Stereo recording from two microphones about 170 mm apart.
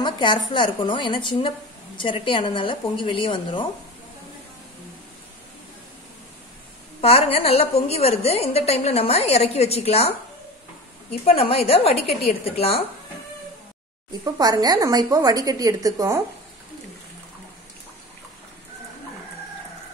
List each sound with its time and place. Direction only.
0.0 s a woman's voice: 25° left (ahead or behind)
7.0 s a woman's voice: 35° left (ahead or behind)
11.2 s a woman's voice: 35° left (ahead or behind)
14.2 s a woman's voice: 20° right (ahead or behind)